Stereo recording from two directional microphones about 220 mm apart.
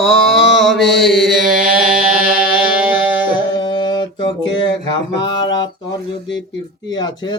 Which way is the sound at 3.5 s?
20° left (ahead or behind).